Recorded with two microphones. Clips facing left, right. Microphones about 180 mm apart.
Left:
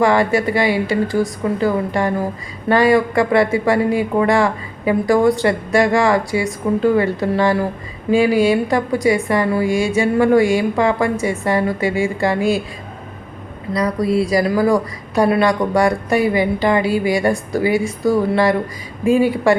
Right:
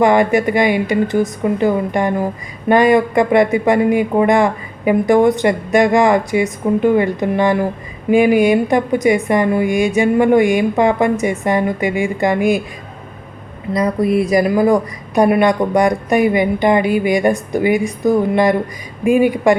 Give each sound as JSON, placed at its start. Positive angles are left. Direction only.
{"t": 0.0, "sound": "a woman's voice", "side_deg": -20}
{"t": 13.7, "sound": "a woman's voice", "side_deg": -20}